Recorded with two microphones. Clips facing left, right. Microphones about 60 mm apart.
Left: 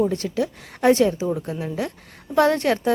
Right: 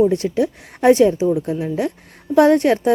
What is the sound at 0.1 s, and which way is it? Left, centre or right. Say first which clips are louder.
Speech: right 6 dB; right.